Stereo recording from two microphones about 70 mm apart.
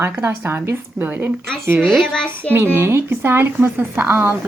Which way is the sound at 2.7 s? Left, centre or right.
Right.